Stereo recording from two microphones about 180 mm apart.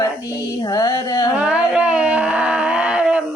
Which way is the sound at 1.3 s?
5° right (ahead or behind).